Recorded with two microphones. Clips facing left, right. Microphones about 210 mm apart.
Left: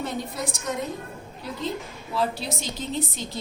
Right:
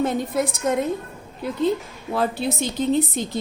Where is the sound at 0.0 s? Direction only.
50° right (ahead or behind).